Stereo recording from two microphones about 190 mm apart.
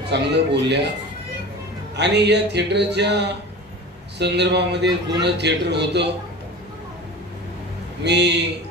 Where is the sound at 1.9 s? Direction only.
65° right (ahead or behind).